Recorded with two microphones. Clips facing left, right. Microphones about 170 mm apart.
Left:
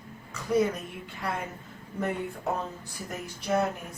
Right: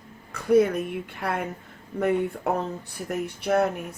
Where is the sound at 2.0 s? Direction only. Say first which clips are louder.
Right 7 dB; 60° right (ahead or behind).